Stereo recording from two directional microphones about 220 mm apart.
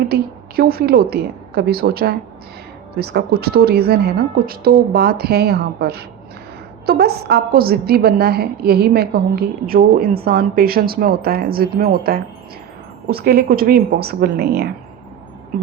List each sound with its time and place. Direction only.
0.1 s a woman's voice: 45° right (ahead or behind)